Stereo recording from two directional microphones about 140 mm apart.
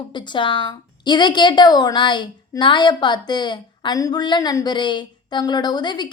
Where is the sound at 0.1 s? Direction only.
35° left (ahead or behind).